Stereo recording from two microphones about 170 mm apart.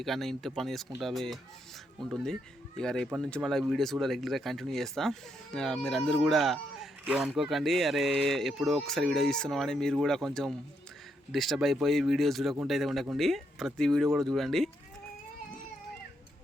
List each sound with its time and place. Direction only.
0.0 s speech: centre (ahead or behind)